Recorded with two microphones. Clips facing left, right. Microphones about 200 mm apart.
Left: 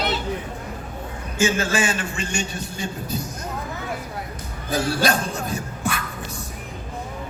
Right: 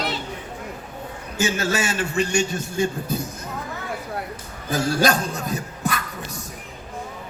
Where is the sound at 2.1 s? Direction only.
45° right (ahead or behind).